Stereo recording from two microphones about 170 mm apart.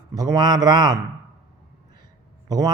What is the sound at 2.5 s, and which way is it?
Speech, 20° right (ahead or behind).